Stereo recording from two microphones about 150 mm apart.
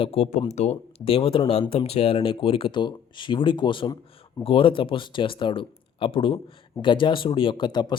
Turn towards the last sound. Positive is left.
turn(degrees=30)  # may be behind; listen again after turning